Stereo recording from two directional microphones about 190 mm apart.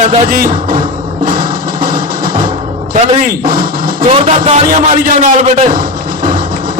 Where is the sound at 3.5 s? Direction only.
50° right (ahead or behind).